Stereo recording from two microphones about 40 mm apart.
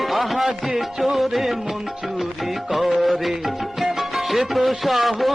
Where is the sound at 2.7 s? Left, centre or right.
Centre.